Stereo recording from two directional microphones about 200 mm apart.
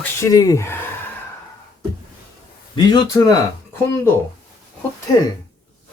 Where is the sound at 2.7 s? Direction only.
20° left (ahead or behind).